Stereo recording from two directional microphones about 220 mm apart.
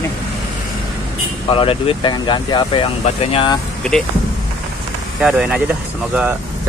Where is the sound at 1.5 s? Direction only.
25° left (ahead or behind).